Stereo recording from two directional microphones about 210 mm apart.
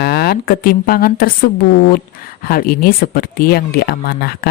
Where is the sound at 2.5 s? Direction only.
45° left (ahead or behind).